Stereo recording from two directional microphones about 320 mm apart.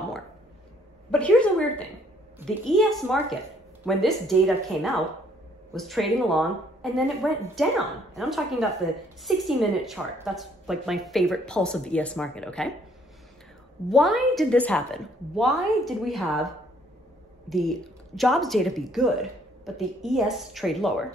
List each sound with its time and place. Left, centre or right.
1.1 s a sound: centre
2.3 s a woman's voice: centre
13.8 s a woman's voice: centre